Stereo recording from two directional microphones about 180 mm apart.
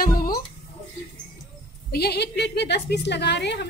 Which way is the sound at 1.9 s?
65° left (ahead or behind).